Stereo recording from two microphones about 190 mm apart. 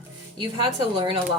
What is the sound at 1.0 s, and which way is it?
Speech, 25° right (ahead or behind).